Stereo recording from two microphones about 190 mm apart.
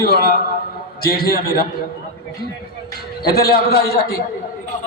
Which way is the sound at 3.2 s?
50° left (ahead or behind).